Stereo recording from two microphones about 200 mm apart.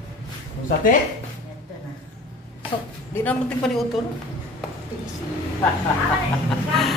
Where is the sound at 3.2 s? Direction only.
5° left (ahead or behind).